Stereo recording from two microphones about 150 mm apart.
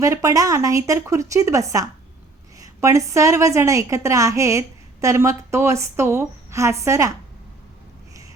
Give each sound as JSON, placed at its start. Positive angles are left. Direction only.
{"t": 0.0, "sound": "a woman's voice", "side_deg": -20}